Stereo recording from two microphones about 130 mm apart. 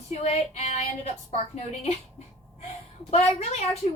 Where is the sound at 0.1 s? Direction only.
55° left (ahead or behind).